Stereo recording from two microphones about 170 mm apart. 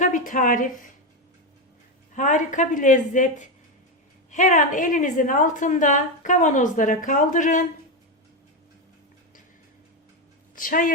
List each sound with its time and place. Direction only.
0.0 s a woman's voice: 50° left (ahead or behind)
2.1 s a woman's voice: 45° left (ahead or behind)
10.5 s a woman's voice: 50° left (ahead or behind)